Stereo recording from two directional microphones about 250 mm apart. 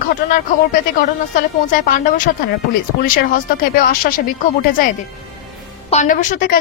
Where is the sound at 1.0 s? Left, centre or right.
Left.